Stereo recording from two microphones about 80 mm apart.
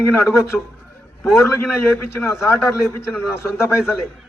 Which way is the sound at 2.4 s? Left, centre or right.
Left.